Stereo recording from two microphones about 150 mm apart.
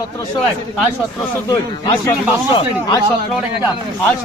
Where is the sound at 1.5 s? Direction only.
20° left (ahead or behind).